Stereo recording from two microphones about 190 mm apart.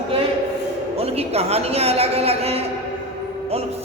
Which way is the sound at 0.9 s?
30° right (ahead or behind).